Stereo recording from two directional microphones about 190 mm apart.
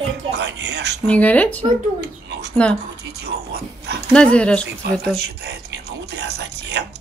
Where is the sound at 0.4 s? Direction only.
65° right (ahead or behind).